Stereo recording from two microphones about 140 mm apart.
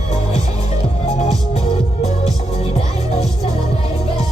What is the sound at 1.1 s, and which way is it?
Music, 55° left (ahead or behind).